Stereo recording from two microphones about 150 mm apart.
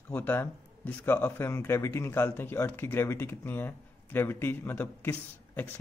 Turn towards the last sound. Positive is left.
turn(degrees=15)  # may be behind; listen again after turning